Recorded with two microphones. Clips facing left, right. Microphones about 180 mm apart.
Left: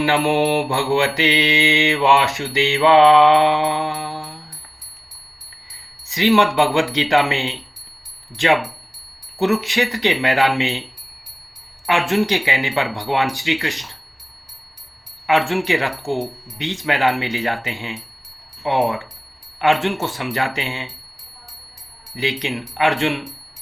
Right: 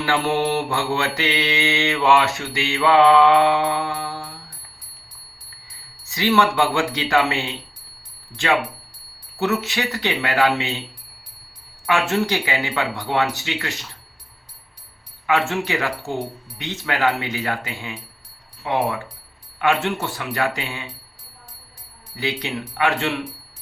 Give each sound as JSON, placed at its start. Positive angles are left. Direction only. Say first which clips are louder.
{"t": 0.0, "sound": "mantra", "louder": "left 4 dB", "side_deg": 15}
{"t": 6.1, "sound": "mantra", "louder": "left 3 dB", "side_deg": 20}
{"t": 8.4, "sound": "speech", "louder": "left 3 dB", "side_deg": 20}
{"t": 10.2, "sound": "mantra", "louder": "right 1 dB", "side_deg": 20}
{"t": 11.9, "sound": "speech", "louder": "left 2 dB", "side_deg": 15}
{"t": 15.4, "sound": "speech", "louder": "left 3 dB", "side_deg": 15}
{"t": 16.6, "sound": "mantra", "louder": "left 3 dB", "side_deg": 20}
{"t": 22.1, "sound": "speech", "louder": "left 2 dB", "side_deg": 15}